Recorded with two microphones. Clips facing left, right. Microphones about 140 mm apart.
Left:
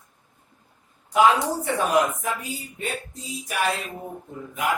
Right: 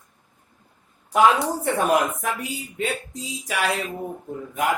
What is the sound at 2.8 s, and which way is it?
Speech, 90° right.